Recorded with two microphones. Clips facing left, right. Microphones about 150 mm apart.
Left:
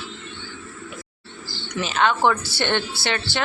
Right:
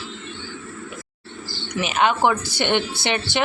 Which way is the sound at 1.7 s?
15° right (ahead or behind).